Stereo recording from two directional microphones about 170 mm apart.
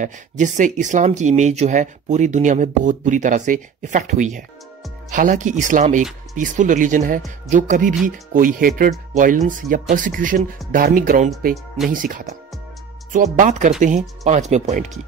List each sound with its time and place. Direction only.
0.0 s speech: 45° right (ahead or behind)